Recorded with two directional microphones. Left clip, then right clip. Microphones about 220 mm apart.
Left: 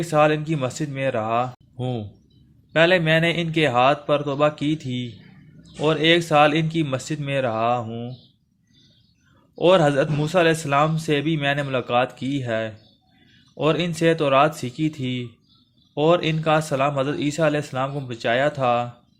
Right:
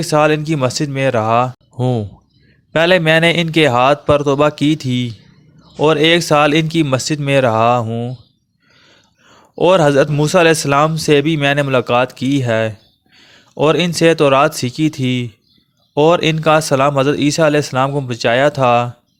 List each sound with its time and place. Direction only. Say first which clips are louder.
0.0 s speech: right 6 dB; 45° right (ahead or behind)
9.6 s speech: right 6 dB; 45° right (ahead or behind)